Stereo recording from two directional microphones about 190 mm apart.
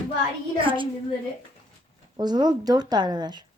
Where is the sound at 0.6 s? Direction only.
25° right (ahead or behind).